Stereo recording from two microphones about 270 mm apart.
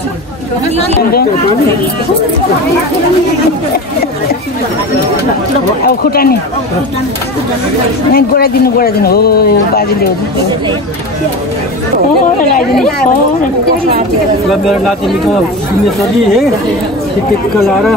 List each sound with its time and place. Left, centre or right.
5.9 s speech: left
8.1 s speech: left
14.5 s speech: centre